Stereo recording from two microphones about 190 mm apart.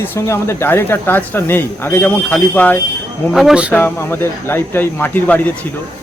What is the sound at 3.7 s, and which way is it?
Speech, 10° left (ahead or behind).